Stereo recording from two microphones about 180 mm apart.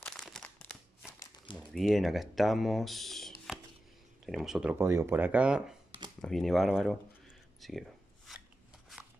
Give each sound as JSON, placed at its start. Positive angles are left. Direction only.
{"t": 0.0, "sound": "crumpling", "side_deg": 5}
{"t": 1.2, "sound": "a sound", "side_deg": 25}
{"t": 1.6, "sound": "speech", "side_deg": 0}
{"t": 4.7, "sound": "speech", "side_deg": -15}
{"t": 8.3, "sound": "filing", "side_deg": 0}